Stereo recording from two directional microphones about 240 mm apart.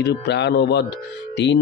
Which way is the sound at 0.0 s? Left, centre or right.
Left.